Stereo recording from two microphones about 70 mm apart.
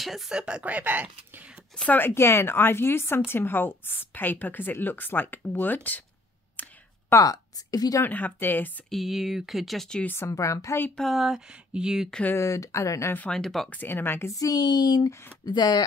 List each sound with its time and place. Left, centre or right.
0.0 s speech: centre
0.3 s speech: centre
1.3 s a sound: centre
2.0 s a woman's voice: left
6.6 s a sound: left
7.1 s a woman's voice: left
8.0 s a woman's voice: left
8.9 s speech: centre
10.0 s speech: left
11.0 s speech: centre
12.4 s speech: left
13.3 s speech: centre
13.7 s a woman's voice: left
14.3 s speech: left